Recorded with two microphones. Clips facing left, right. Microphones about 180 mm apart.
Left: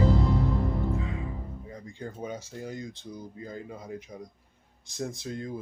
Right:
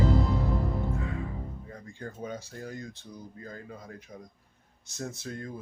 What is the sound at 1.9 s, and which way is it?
Speech, 15° left (ahead or behind).